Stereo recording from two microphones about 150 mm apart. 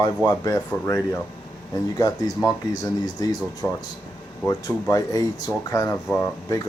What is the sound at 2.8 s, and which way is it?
Speech, 25° left (ahead or behind).